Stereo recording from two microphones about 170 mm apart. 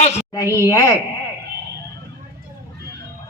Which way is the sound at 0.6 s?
20° left (ahead or behind).